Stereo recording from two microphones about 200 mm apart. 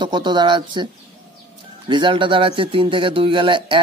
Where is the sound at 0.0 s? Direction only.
20° right (ahead or behind).